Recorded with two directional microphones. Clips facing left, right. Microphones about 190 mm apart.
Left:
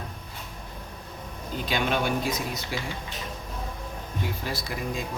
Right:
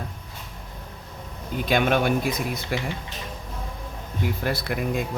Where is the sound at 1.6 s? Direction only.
55° right (ahead or behind).